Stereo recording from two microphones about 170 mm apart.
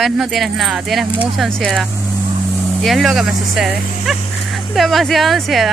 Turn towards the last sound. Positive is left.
turn(degrees=0)  # may be behind; listen again after turning